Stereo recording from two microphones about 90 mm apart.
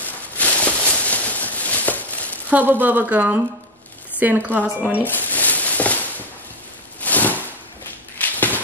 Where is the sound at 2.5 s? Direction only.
20° right (ahead or behind).